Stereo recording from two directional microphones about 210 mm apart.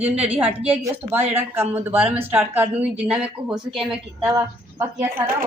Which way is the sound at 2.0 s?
30° right (ahead or behind).